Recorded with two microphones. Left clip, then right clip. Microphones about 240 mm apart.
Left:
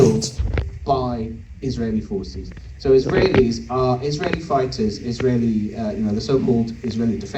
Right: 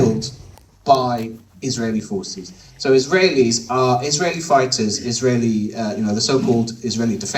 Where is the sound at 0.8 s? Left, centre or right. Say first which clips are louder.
Right 6 dB; right.